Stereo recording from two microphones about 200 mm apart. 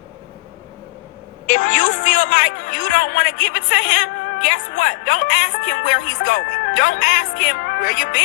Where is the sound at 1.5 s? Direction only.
40° left (ahead or behind).